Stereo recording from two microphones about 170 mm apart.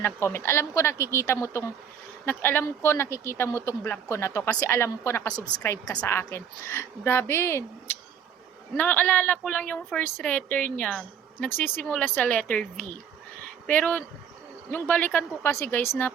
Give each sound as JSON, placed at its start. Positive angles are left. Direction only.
{"t": 0.0, "sound": "a woman's voice", "side_deg": 15}
{"t": 8.7, "sound": "a woman's voice", "side_deg": 10}